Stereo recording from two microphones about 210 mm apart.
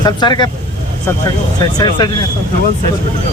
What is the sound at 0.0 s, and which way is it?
Speech, 20° left (ahead or behind).